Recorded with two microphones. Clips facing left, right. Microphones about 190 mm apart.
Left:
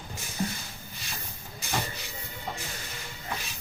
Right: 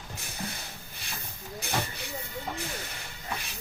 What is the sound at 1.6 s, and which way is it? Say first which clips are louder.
Hiss: even; 60° right (ahead or behind).